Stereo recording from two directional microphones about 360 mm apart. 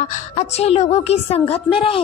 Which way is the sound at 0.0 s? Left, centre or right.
Centre.